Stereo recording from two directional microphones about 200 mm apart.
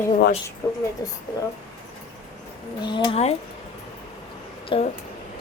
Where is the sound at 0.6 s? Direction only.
15° left (ahead or behind).